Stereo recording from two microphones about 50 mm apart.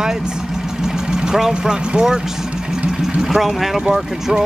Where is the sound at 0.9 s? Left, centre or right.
Centre.